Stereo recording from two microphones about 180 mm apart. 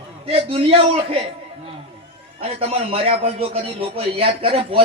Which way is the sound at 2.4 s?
35° right (ahead or behind).